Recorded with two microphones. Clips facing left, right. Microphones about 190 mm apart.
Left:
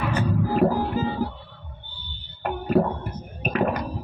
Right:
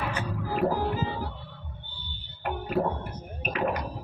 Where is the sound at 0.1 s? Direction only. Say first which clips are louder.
Left 8 dB; 40° left (ahead or behind).